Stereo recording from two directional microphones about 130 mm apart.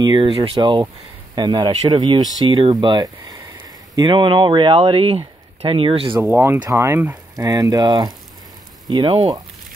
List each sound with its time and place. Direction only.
0.0 s speech: 40° right (ahead or behind)
6.6 s speech: 25° right (ahead or behind)